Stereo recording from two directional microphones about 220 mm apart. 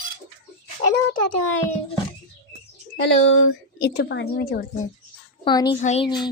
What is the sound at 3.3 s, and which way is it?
Speech, 50° left (ahead or behind).